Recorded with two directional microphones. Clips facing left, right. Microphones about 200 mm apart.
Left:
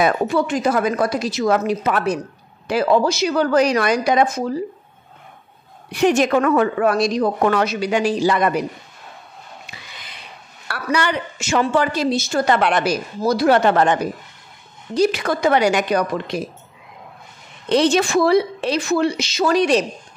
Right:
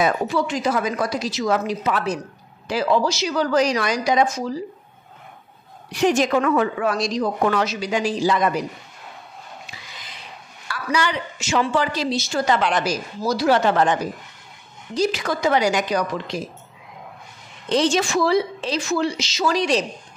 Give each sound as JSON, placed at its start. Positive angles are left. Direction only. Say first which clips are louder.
{"t": 0.0, "sound": "a woman's voice", "louder": "left 3 dB", "side_deg": 55}
{"t": 5.9, "sound": "a woman's voice", "louder": "left 3 dB", "side_deg": 60}
{"t": 9.7, "sound": "a sound", "louder": "left 1 dB", "side_deg": 60}
{"t": 10.7, "sound": "a woman's voice", "louder": "left 2 dB", "side_deg": 60}
{"t": 17.6, "sound": "a woman's voice", "louder": "left 3 dB", "side_deg": 60}